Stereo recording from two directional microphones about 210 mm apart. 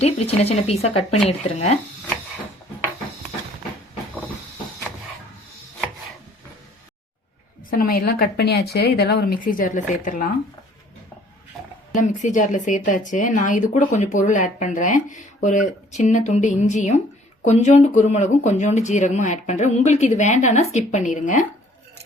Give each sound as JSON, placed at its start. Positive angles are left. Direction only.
{"t": 0.0, "sound": "speech", "side_deg": 30}
{"t": 7.7, "sound": "speech", "side_deg": 45}
{"t": 11.9, "sound": "speech", "side_deg": 35}